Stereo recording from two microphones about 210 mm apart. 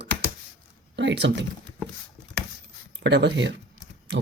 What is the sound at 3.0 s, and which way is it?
Speech, 55° right (ahead or behind).